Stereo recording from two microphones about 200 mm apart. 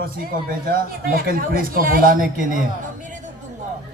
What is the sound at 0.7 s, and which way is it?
A man's voice, 45° right (ahead or behind).